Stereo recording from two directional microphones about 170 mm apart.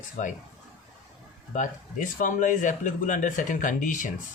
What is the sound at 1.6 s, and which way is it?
Speech, 50° left (ahead or behind).